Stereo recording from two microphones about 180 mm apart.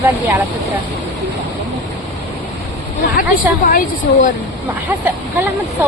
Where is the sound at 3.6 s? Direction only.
50° left (ahead or behind).